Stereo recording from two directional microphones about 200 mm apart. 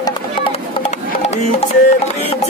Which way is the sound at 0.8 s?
30° left (ahead or behind).